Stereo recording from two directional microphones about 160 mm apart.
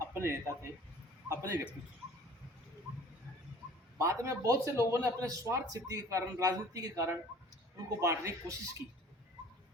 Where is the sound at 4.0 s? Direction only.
20° right (ahead or behind).